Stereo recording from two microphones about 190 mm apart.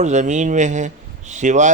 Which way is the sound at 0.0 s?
40° right (ahead or behind).